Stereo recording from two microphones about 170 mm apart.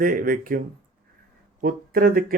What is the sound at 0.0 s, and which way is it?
Speech, 55° right (ahead or behind).